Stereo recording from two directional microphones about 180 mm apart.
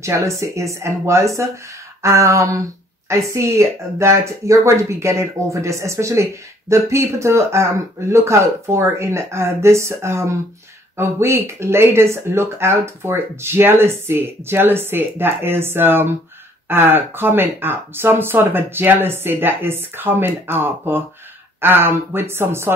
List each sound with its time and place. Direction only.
0.0 s speech: 15° right (ahead or behind)